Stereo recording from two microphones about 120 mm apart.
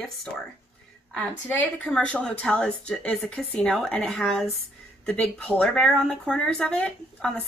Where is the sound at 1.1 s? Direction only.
15° left (ahead or behind).